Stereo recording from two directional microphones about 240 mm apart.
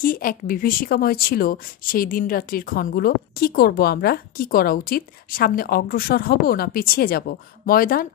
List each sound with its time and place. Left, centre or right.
0.0 s a woman's voice: left